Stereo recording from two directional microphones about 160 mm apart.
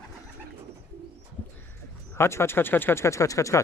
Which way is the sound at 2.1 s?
15° left (ahead or behind).